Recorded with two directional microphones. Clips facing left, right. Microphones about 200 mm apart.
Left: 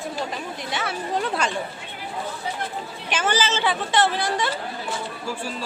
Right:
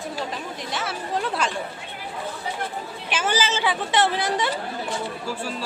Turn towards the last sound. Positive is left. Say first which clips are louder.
# even
turn(degrees=-20)  # may be behind; listen again after turning